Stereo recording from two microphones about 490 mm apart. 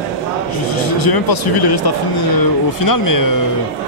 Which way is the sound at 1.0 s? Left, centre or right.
Left.